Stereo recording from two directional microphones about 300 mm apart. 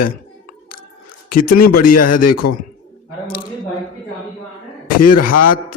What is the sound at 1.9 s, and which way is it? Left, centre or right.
Speech, left.